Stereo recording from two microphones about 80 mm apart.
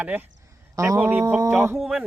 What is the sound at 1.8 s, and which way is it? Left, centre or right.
Speech, centre.